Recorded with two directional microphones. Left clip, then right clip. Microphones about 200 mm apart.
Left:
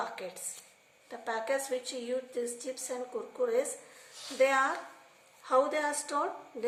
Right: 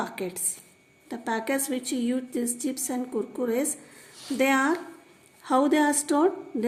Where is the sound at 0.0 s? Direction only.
50° right (ahead or behind).